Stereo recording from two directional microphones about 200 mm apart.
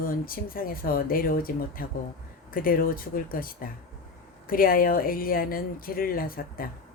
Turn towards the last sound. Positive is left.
turn(degrees=45)  # may be behind; listen again after turning